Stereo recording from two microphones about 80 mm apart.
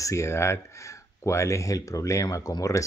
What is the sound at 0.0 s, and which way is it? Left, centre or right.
Speech, left.